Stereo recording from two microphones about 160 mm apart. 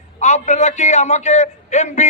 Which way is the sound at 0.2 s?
45° left (ahead or behind).